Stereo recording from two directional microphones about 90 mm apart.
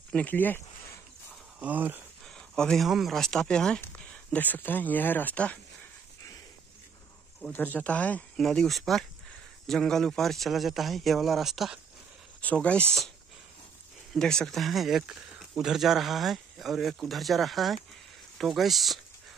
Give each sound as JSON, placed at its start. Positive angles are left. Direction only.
{"t": 0.1, "sound": "speech", "side_deg": 15}
{"t": 1.6, "sound": "speech", "side_deg": -20}
{"t": 2.2, "sound": "a sound", "side_deg": 5}
{"t": 2.9, "sound": "speech", "side_deg": 0}
{"t": 4.3, "sound": "speech", "side_deg": 20}
{"t": 7.5, "sound": "speech", "side_deg": 20}
{"t": 8.4, "sound": "speech", "side_deg": 5}
{"t": 12.4, "sound": "speech", "side_deg": 15}
{"t": 14.1, "sound": "speech", "side_deg": 5}